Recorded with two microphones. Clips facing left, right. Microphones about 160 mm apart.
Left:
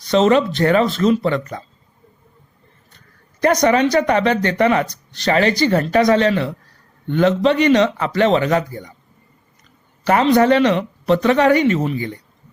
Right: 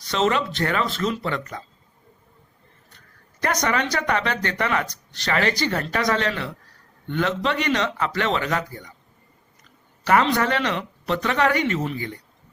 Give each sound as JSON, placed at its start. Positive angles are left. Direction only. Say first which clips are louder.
{"t": 0.1, "sound": "speech", "louder": "left 8 dB", "side_deg": 25}
{"t": 3.4, "sound": "speech", "louder": "left 9 dB", "side_deg": 25}
{"t": 10.1, "sound": "speech", "louder": "left 7 dB", "side_deg": 25}